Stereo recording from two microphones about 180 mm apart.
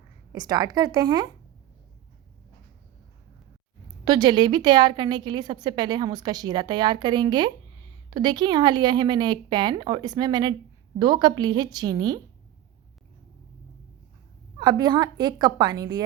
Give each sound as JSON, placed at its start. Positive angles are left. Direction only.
{"t": 0.3, "sound": "a woman's voice", "side_deg": -20}
{"t": 4.0, "sound": "a woman's voice", "side_deg": -25}
{"t": 14.6, "sound": "a woman's voice", "side_deg": -25}